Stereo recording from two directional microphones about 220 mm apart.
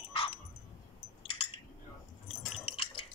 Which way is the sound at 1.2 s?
25° left (ahead or behind).